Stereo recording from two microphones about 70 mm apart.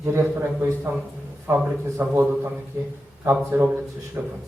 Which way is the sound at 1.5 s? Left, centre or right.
Right.